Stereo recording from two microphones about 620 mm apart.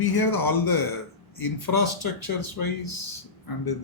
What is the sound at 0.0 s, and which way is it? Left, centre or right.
Speech, left.